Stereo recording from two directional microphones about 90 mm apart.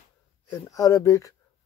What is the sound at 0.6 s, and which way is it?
Speech, 40° left (ahead or behind).